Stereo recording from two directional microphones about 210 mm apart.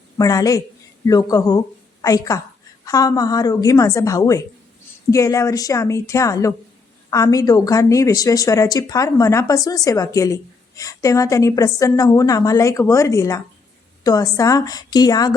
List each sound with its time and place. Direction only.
0.2 s a woman's voice: 15° left (ahead or behind)